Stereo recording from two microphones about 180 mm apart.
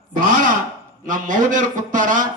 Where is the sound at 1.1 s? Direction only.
45° right (ahead or behind).